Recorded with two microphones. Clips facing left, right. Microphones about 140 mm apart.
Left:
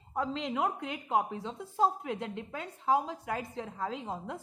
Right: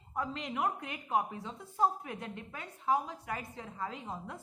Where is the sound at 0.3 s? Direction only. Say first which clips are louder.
Left 1 dB; 90° left.